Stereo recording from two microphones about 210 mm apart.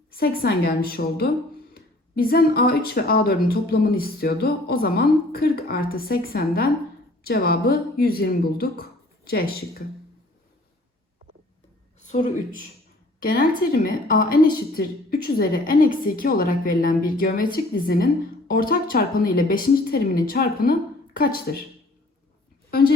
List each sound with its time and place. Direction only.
0.1 s a woman's voice: 45° left (ahead or behind)
12.0 s a woman's voice: 35° left (ahead or behind)